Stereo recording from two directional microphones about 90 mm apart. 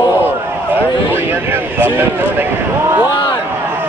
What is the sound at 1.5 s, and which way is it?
Speech, 25° right (ahead or behind).